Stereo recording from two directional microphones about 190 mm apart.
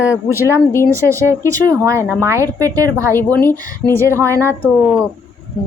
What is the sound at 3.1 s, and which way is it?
Speech, 10° left (ahead or behind).